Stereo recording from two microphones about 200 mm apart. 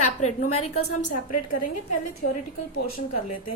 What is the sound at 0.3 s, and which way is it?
Female singing, 35° left (ahead or behind).